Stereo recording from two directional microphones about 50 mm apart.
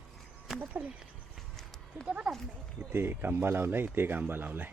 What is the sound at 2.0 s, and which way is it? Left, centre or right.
Speech, right.